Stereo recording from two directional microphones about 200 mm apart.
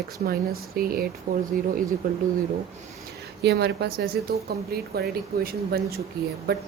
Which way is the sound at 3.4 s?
55° right (ahead or behind).